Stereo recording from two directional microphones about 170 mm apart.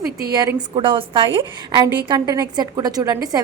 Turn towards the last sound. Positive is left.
turn(degrees=-20)  # may be behind; listen again after turning